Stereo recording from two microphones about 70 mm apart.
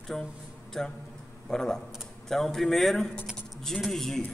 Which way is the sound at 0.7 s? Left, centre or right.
Centre.